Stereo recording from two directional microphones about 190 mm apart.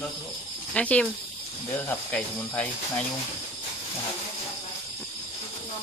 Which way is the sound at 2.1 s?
5° left (ahead or behind).